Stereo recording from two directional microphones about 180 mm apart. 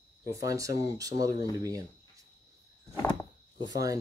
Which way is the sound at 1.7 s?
20° right (ahead or behind).